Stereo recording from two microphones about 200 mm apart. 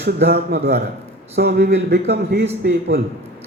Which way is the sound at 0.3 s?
55° right (ahead or behind).